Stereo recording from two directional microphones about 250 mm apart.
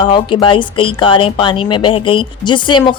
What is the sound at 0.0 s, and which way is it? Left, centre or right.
Speech, centre.